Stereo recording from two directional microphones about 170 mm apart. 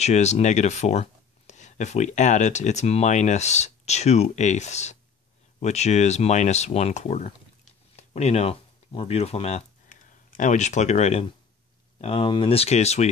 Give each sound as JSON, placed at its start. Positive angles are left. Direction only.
{"t": 0.0, "sound": "speech", "side_deg": 40}